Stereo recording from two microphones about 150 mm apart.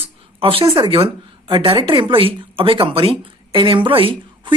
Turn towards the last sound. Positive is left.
turn(degrees=-35)  # may be behind; listen again after turning